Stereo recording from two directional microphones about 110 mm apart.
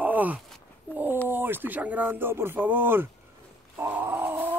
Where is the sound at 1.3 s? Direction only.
20° right (ahead or behind).